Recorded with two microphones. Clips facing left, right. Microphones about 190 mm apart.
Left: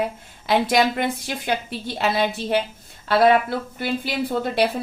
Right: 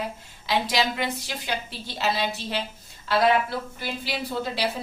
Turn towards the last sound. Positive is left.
turn(degrees=55)  # may be behind; listen again after turning